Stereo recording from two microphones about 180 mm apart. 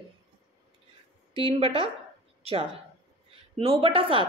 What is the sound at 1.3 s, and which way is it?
Speech, 30° right (ahead or behind).